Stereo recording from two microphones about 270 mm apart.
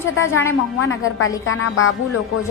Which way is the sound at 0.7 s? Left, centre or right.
Left.